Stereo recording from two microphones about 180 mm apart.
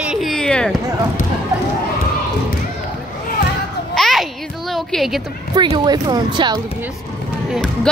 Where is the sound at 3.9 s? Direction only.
Centre (ahead or behind).